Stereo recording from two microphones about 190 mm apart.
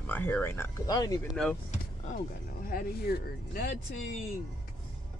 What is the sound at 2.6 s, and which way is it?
Speech, 50° left (ahead or behind).